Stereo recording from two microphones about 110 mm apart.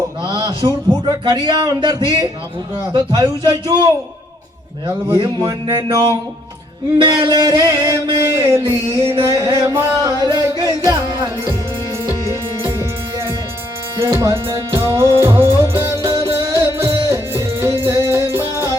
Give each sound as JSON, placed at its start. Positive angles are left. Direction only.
{"t": 0.3, "sound": "speech", "side_deg": -35}
{"t": 3.2, "sound": "music", "side_deg": -35}
{"t": 5.1, "sound": "music", "side_deg": -40}
{"t": 7.0, "sound": "music", "side_deg": -40}
{"t": 10.0, "sound": "music", "side_deg": -35}
{"t": 12.0, "sound": "music", "side_deg": -30}
{"t": 14.0, "sound": "music", "side_deg": -25}